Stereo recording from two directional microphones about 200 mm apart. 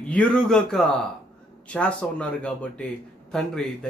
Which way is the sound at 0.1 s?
5° left (ahead or behind).